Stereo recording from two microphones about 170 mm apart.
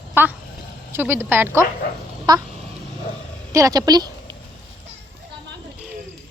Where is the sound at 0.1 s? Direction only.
10° right (ahead or behind).